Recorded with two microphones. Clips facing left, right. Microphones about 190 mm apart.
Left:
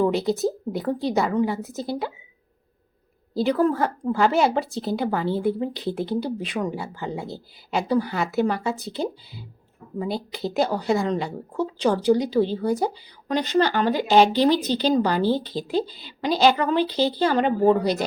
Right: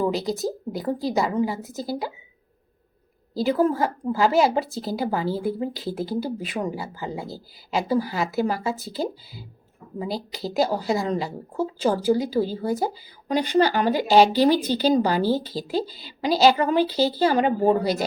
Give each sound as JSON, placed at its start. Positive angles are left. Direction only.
{"t": 0.0, "sound": "speech", "side_deg": 0}
{"t": 3.3, "sound": "speech", "side_deg": 0}
{"t": 15.9, "sound": "a woman's voice", "side_deg": -40}
{"t": 16.2, "sound": "speech", "side_deg": -10}